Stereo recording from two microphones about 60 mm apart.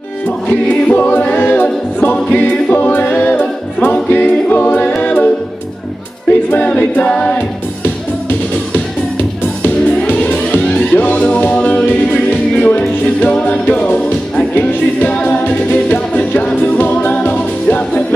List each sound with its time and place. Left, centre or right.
0.5 s a capella: left
5.0 s music: left
6.5 s a capella: left
7.3 s music: left